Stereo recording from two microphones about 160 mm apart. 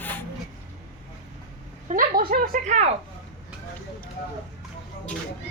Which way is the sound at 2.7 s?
45° right (ahead or behind).